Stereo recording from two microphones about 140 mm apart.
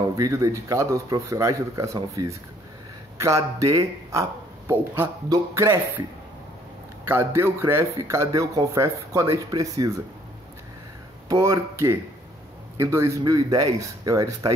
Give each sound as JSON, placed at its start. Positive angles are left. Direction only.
{"t": 0.1, "sound": "speech", "side_deg": -25}
{"t": 7.1, "sound": "speech", "side_deg": -15}
{"t": 11.2, "sound": "speech", "side_deg": -25}